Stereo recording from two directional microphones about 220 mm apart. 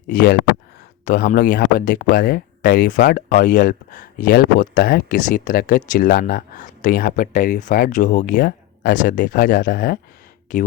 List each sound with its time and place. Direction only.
0.1 s speech: 40° left (ahead or behind)